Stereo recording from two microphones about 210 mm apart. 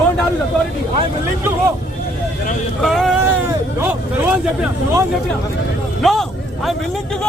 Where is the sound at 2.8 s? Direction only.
Centre (ahead or behind).